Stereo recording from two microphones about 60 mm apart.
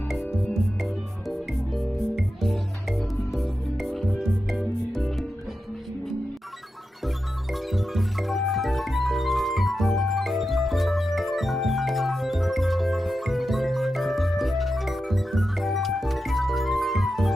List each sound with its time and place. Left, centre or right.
0.1 s music: centre
1.7 s music: centre
7.5 s music: centre